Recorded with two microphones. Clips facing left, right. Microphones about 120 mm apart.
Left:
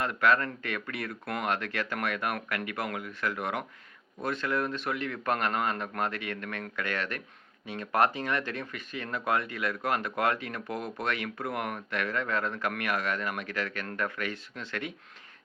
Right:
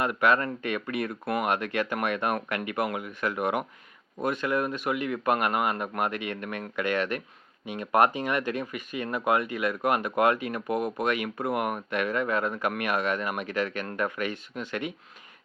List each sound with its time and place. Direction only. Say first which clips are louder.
0.0 s speech: right 2 dB; 15° right (ahead or behind)